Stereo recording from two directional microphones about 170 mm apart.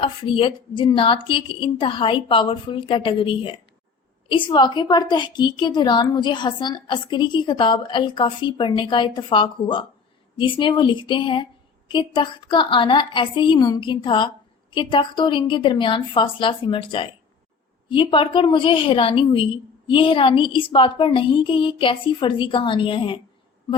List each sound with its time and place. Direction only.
0.0 s a woman's voice: 30° left (ahead or behind)